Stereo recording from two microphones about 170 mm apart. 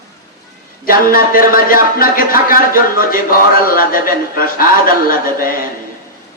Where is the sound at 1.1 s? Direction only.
55° left (ahead or behind).